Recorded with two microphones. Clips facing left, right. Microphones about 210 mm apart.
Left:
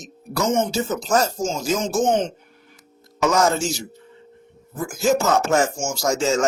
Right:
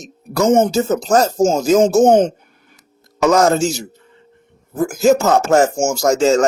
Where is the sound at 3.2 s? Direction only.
40° right (ahead or behind).